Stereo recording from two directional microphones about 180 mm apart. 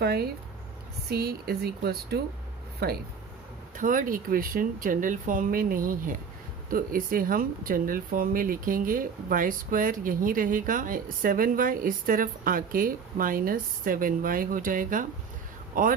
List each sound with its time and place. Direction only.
0.0 s speech: 60° right (ahead or behind)
3.8 s speech: 45° right (ahead or behind)